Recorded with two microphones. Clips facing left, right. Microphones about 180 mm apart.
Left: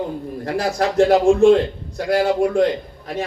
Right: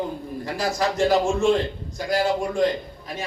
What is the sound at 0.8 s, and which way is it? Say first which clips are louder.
Speech: left 6 dB; 60° left (ahead or behind).